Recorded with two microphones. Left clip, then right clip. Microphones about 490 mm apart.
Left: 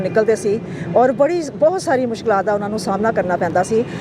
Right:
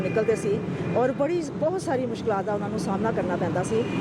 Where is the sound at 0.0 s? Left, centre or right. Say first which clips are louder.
Left 8 dB; centre.